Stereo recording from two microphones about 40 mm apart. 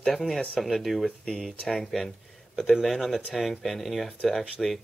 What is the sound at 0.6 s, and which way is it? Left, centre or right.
Speech, centre.